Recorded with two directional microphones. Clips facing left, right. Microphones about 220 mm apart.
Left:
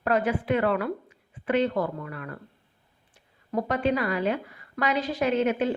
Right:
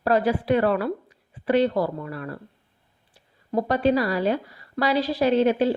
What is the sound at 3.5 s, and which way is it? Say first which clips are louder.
A woman's voice: right 4 dB; 35° right (ahead or behind).